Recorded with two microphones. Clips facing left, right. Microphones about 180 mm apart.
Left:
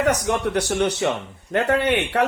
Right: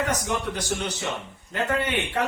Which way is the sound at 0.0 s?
65° left (ahead or behind).